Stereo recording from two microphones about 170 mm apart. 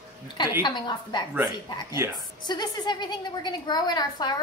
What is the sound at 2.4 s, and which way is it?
A woman's voice, 25° left (ahead or behind).